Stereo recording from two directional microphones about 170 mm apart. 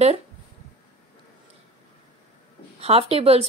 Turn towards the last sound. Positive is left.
turn(degrees=-35)  # may be behind; listen again after turning